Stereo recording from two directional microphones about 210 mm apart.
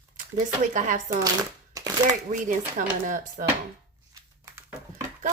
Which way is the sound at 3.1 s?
40° right (ahead or behind).